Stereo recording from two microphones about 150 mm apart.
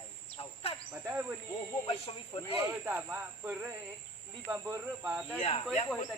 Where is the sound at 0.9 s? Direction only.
15° right (ahead or behind).